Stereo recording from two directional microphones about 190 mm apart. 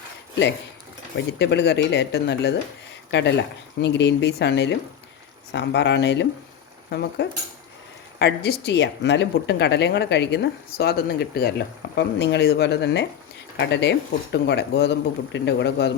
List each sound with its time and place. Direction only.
1.1 s speech: 65° left (ahead or behind)